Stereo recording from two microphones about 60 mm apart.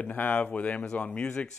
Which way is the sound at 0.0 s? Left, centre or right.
Left.